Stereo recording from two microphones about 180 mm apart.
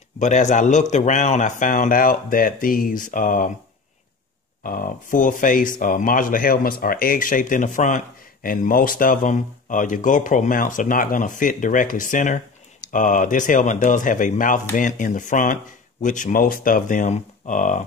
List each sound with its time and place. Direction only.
0.2 s speech: 40° left (ahead or behind)
4.6 s speech: 50° left (ahead or behind)